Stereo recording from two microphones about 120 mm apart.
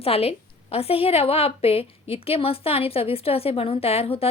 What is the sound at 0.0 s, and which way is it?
A woman's voice, 55° left (ahead or behind).